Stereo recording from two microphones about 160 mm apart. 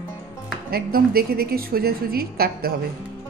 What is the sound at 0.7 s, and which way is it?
A woman's voice, 70° right (ahead or behind).